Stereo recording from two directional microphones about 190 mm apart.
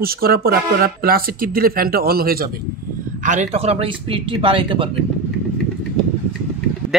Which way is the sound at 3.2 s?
40° right (ahead or behind).